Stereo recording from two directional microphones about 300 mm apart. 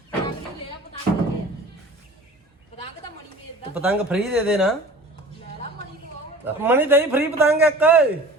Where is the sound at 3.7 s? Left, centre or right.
Centre.